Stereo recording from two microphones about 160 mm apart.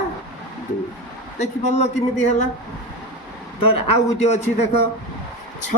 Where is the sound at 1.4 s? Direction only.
45° left (ahead or behind).